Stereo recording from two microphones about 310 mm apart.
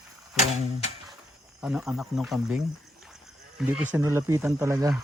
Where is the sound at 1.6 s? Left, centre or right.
Centre.